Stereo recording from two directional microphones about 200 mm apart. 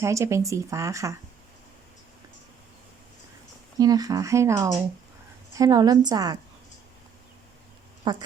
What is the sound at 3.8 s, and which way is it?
A woman's voice, 20° right (ahead or behind).